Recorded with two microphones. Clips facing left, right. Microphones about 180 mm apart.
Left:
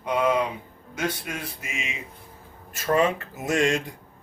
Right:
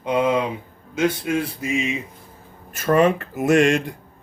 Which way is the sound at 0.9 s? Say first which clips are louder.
Right 9 dB; 25° right (ahead or behind).